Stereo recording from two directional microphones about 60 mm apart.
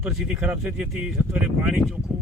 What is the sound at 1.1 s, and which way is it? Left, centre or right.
Speech, centre.